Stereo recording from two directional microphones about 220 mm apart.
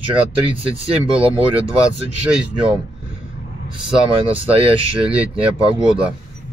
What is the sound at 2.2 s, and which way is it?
Speech, 5° right (ahead or behind).